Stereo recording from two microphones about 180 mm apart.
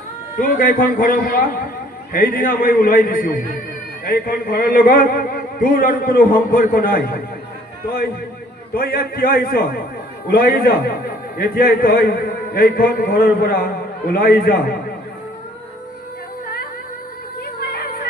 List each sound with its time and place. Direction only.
0.4 s a man's voice: 50° left (ahead or behind)
8.7 s a man's voice: 55° left (ahead or behind)